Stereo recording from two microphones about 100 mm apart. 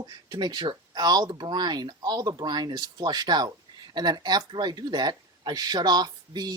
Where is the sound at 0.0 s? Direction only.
45° right (ahead or behind).